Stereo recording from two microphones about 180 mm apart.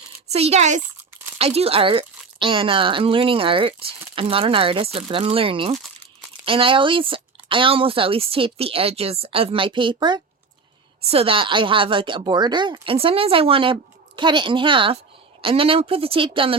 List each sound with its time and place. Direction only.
0.3 s speech: 35° right (ahead or behind)